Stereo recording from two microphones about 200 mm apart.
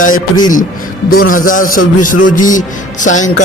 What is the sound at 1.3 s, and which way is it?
Music, 40° left (ahead or behind).